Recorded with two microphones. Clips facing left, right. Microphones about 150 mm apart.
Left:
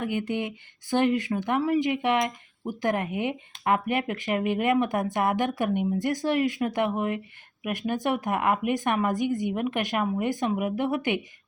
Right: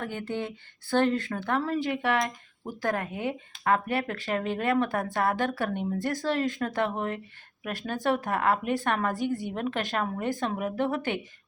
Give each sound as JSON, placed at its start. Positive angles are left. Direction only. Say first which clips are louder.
{"t": 0.0, "sound": "speech", "louder": "left 4 dB", "side_deg": 15}